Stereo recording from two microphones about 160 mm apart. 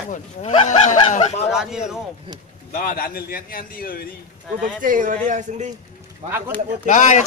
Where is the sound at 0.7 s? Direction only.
50° left (ahead or behind).